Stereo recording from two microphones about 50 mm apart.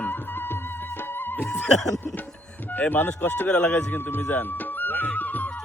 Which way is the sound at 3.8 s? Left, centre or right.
Left.